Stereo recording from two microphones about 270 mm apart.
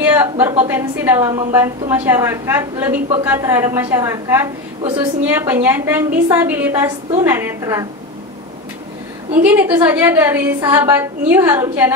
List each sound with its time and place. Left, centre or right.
0.0 s a woman's voice: centre
9.4 s a woman's voice: centre